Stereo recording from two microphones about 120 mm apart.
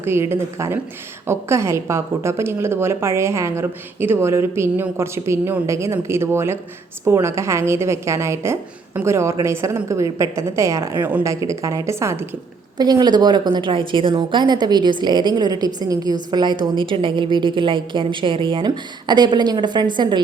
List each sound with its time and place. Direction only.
0.0 s a woman's voice: 20° right (ahead or behind)
12.7 s a woman's voice: 35° right (ahead or behind)